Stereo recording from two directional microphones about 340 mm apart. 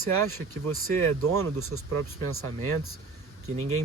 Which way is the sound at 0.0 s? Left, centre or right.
Right.